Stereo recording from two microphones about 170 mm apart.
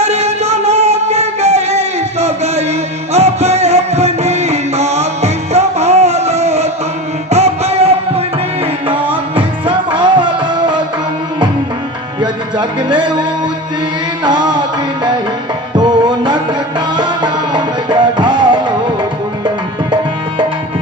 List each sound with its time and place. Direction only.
0.0 s music: 40° right (ahead or behind)
12.2 s music: 25° right (ahead or behind)
15.7 s music: 25° right (ahead or behind)